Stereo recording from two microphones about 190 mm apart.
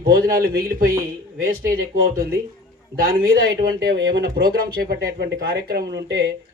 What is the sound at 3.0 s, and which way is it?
Speech, 55° right (ahead or behind).